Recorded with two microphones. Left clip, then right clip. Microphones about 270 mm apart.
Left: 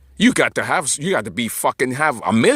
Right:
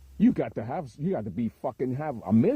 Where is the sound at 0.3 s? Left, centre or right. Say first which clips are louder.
Left 14 dB; centre.